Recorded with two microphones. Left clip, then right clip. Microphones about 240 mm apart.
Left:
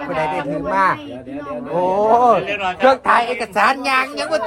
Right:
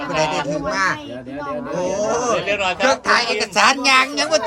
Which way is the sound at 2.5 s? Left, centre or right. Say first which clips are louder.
Right 2 dB; right.